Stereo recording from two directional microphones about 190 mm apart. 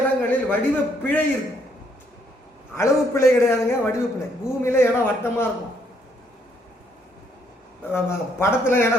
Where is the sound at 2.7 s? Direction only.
15° left (ahead or behind).